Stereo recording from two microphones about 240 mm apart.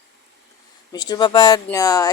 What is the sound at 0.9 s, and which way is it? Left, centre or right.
A woman's voice, centre.